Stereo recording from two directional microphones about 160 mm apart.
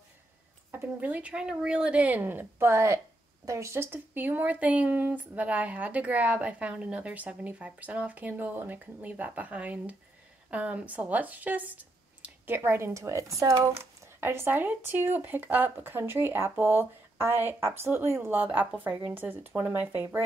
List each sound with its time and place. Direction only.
0.7 s speech: 10° right (ahead or behind)